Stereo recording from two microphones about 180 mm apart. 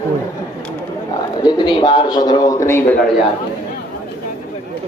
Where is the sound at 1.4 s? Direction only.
25° left (ahead or behind).